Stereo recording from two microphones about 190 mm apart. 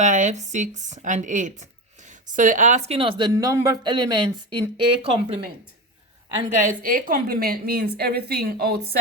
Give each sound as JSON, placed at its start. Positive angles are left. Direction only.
{"t": 0.0, "sound": "speech", "side_deg": -40}
{"t": 6.6, "sound": "a woman's voice", "side_deg": -45}